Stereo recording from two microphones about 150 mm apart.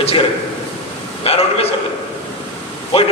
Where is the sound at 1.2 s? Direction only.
40° left (ahead or behind).